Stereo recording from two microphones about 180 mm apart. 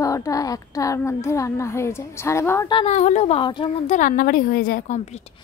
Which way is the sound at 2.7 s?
35° left (ahead or behind).